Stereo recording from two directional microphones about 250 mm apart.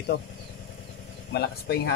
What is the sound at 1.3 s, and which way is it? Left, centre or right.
Speech, left.